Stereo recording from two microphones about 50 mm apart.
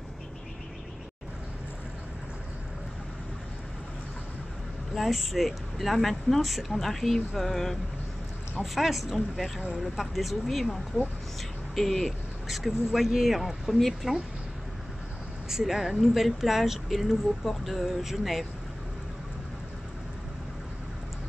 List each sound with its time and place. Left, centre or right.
4.9 s speech: centre
15.5 s speech: centre